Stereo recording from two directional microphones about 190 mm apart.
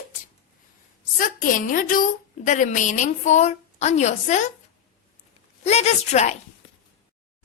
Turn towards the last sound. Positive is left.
turn(degrees=35)  # may be behind; listen again after turning